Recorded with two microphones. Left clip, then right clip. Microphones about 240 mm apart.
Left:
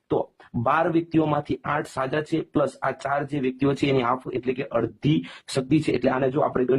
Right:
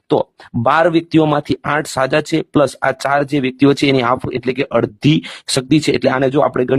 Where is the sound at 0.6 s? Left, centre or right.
Right.